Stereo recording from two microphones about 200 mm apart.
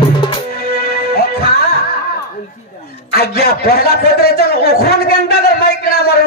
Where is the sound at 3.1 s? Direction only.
50° left (ahead or behind).